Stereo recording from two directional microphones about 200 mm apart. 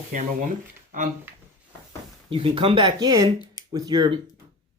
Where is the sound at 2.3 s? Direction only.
25° right (ahead or behind).